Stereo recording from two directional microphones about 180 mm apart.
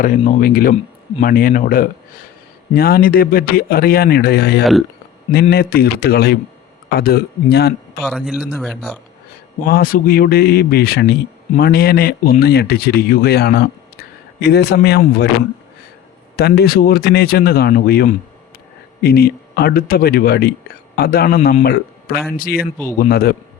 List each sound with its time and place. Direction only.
0.2 s speech: 45° left (ahead or behind)
8.0 s speech: centre (ahead or behind)
9.6 s speech: 55° left (ahead or behind)
16.3 s a man's voice: 65° left (ahead or behind)